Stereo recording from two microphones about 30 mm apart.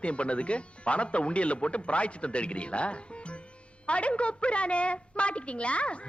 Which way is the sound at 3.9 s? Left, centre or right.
Left.